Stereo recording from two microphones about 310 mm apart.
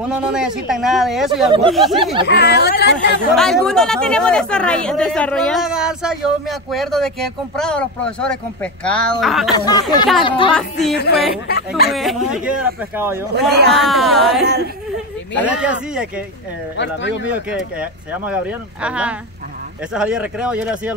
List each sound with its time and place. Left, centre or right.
0.1 s speech: centre
2.2 s speech: left
3.3 s speech: centre
9.5 s speech: centre
10.5 s speech: centre
11.4 s speech: left
11.9 s speech: centre
13.5 s speech: right
13.8 s speech: centre
14.4 s speech: right
15.4 s speech: centre
16.7 s speech: left
17.5 s speech: centre